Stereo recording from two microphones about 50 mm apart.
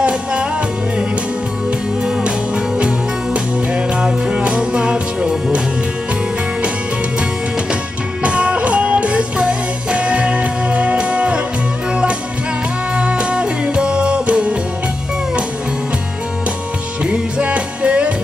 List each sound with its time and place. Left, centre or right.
0.0 s music: right
2.0 s music: right
8.2 s music: right
17.0 s music: centre